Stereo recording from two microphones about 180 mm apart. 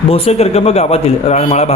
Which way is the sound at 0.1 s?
35° left (ahead or behind).